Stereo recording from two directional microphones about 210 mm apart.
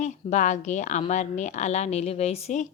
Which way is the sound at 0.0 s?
35° left (ahead or behind).